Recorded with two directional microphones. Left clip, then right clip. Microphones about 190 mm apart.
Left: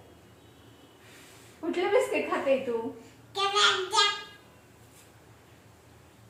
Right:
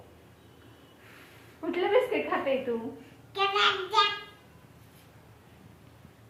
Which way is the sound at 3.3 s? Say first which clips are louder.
Left 1 dB; 25° left (ahead or behind).